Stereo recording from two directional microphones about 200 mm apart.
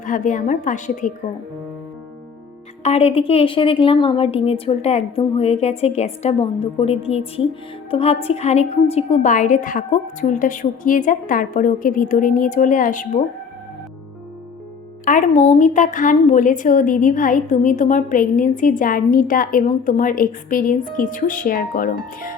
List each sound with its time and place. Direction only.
0.0 s a woman's voice: 40° left (ahead or behind)
2.8 s a woman's voice: 30° left (ahead or behind)
15.0 s a woman's voice: 40° left (ahead or behind)